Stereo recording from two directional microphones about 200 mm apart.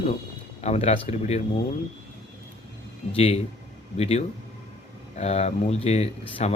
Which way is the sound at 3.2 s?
30° left (ahead or behind).